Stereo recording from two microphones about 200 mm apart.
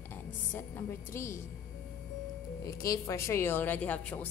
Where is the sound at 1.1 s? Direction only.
15° left (ahead or behind).